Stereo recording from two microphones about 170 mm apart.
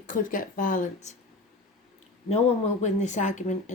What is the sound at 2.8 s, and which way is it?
Speech, 45° left (ahead or behind).